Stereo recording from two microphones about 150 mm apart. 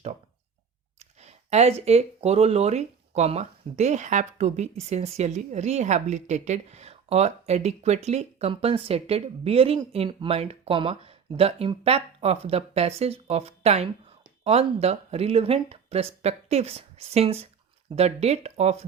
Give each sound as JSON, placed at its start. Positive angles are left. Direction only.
{"t": 0.9, "sound": "speech", "side_deg": -45}